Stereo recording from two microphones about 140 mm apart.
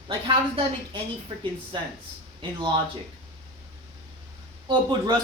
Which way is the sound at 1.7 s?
35° right (ahead or behind).